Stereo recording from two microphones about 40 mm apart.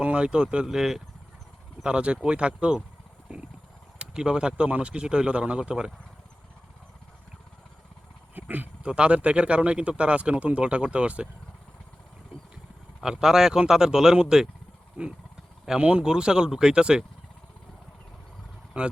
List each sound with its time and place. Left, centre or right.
0.0 s speech: right; by 1.0 s centre
1.8 s speech: right
3.9 s speech: centre
8.4 s speech: right
8.8 s speech: right
13.0 s speech: centre
15.8 s speech: right
16.0 s speech: centre
18.8 s speech: right